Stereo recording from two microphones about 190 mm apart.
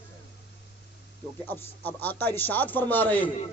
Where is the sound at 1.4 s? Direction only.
10° left (ahead or behind).